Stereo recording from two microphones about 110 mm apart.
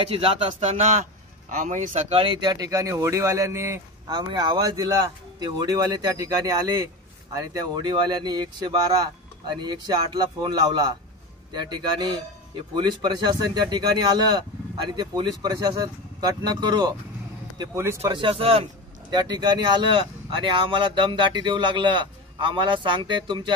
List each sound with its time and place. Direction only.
0.0 s speech: 60° right (ahead or behind); by 2.2 s 80° right
2.2 s speech: 35° right (ahead or behind)
4.1 s speech: 40° right (ahead or behind)
17.7 s speech: 25° right (ahead or behind)
18.1 s speech: 55° right (ahead or behind)
19.0 s speech: 40° right (ahead or behind)